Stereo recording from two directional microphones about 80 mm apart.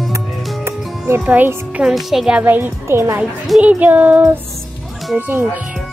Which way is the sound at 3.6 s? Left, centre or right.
Centre.